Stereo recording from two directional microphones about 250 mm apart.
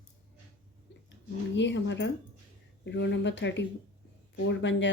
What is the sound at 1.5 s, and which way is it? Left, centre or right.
Speech, left.